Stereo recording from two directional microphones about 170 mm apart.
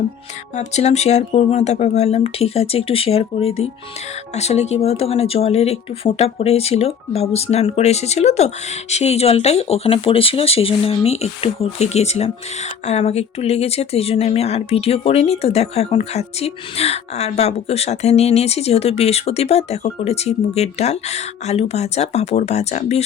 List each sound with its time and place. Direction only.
0.5 s speech: 40° left (ahead or behind)